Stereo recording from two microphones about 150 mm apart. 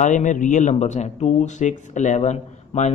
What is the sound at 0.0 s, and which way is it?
A man's voice, 55° left (ahead or behind).